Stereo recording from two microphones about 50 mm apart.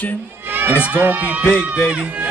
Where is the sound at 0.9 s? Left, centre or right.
Right.